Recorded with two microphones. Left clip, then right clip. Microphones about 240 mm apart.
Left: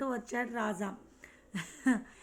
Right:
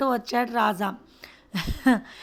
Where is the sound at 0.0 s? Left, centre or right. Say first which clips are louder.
Right 11 dB; right.